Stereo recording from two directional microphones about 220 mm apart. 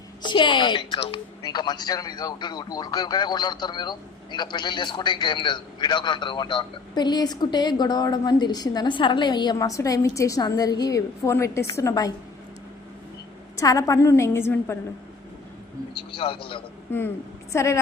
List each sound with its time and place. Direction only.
0.2 s a woman's voice: 20° left (ahead or behind)
13.6 s a woman's voice: 15° left (ahead or behind)
16.0 s a woman's voice: 25° left (ahead or behind)
17.5 s a woman's voice: 15° left (ahead or behind)